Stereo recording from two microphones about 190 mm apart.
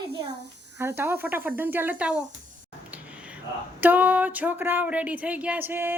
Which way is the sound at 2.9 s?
5° right (ahead or behind).